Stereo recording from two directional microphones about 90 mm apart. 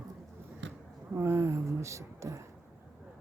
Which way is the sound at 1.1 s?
30° right (ahead or behind).